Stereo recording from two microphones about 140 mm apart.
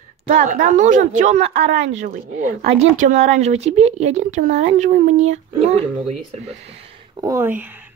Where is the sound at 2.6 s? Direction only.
50° right (ahead or behind).